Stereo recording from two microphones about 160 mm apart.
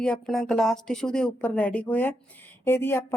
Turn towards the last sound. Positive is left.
turn(degrees=15)  # may be behind; listen again after turning